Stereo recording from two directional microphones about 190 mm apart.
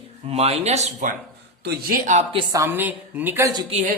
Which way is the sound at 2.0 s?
30° right (ahead or behind).